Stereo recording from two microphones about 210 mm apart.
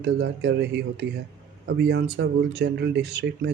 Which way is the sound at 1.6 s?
55° right (ahead or behind).